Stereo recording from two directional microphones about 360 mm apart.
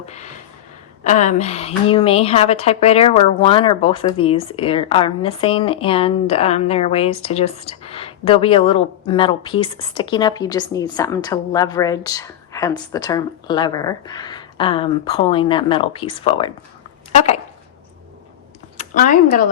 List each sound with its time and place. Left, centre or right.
0.0 s a sound: centre
1.0 s a woman's voice: centre
18.8 s speech: left